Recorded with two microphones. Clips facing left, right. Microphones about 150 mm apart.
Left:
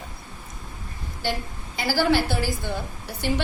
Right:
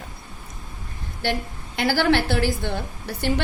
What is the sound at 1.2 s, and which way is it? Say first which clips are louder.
A woman's voice: right 3 dB; 60° right (ahead or behind).